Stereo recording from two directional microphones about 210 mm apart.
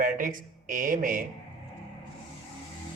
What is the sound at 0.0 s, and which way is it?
Speech, 40° right (ahead or behind).